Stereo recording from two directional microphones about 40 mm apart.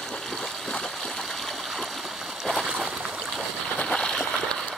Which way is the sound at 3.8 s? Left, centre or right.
Left.